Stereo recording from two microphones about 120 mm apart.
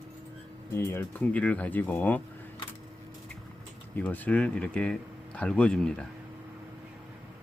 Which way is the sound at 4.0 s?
15° left (ahead or behind).